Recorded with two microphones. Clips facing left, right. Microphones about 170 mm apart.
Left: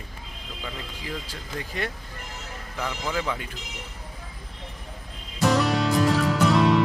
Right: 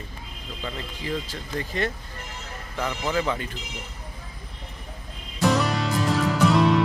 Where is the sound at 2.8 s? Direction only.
Centre (ahead or behind).